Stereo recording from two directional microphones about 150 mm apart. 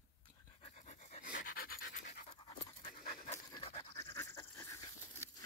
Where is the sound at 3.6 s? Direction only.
40° left (ahead or behind).